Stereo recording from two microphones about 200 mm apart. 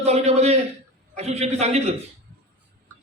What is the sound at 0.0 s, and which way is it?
A man's voice, 30° right (ahead or behind).